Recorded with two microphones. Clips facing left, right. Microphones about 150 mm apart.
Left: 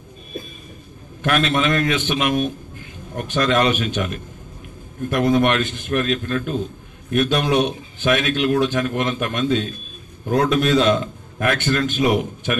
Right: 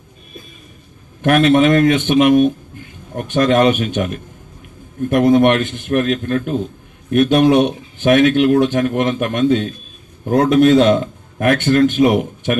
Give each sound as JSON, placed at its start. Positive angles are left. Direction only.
{"t": 1.2, "sound": "speech", "side_deg": -50}